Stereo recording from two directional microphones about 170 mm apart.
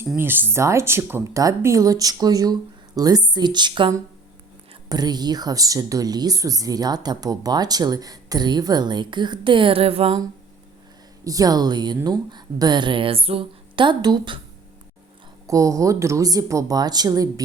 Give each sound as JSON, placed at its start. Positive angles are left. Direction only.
{"t": 0.2, "sound": "speech", "side_deg": -10}
{"t": 11.2, "sound": "speech", "side_deg": -20}
{"t": 15.4, "sound": "speech", "side_deg": -20}